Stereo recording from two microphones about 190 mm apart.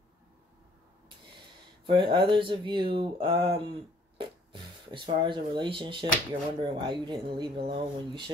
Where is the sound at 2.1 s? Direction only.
25° right (ahead or behind).